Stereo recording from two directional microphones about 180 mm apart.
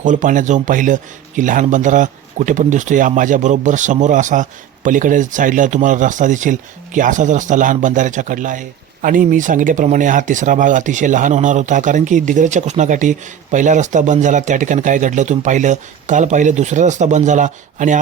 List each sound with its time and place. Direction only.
0.0 s speech: 45° right (ahead or behind)